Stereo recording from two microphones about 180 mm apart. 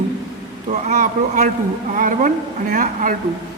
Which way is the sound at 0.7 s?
45° right (ahead or behind).